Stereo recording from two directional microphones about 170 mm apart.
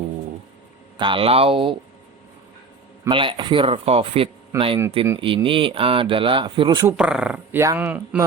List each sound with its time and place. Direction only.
0.9 s speech: 30° right (ahead or behind)
3.1 s speech: 30° right (ahead or behind)
6.8 s speech: 5° right (ahead or behind)